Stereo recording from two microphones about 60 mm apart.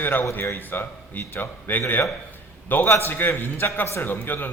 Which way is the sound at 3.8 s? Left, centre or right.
Left.